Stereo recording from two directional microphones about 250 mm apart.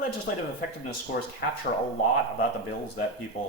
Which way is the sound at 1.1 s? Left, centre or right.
Left.